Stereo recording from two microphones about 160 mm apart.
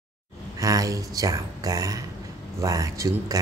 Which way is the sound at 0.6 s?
20° right (ahead or behind).